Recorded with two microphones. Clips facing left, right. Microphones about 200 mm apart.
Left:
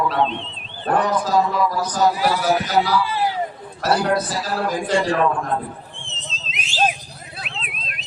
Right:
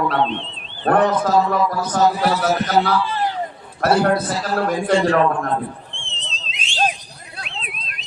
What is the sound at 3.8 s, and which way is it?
A man's voice, 55° right (ahead or behind).